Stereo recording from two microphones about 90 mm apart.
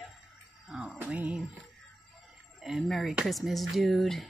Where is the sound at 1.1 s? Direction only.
15° right (ahead or behind).